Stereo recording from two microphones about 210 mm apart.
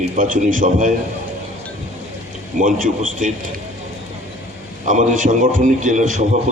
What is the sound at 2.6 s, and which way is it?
Speech, 35° right (ahead or behind).